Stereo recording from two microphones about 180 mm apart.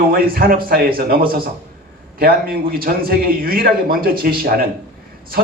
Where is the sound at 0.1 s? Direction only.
55° right (ahead or behind).